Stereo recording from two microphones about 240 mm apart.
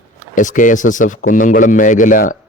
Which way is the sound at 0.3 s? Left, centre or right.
Left.